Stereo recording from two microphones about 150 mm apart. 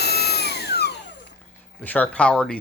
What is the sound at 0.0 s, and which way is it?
Vacuum cleaner, 90° left.